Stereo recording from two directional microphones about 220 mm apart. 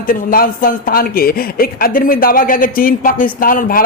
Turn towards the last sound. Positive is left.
turn(degrees=40)  # may be behind; listen again after turning